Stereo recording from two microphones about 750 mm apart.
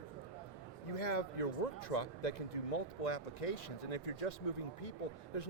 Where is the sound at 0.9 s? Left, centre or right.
Left.